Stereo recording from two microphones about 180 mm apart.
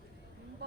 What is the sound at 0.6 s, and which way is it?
Vehicle, 65° right (ahead or behind).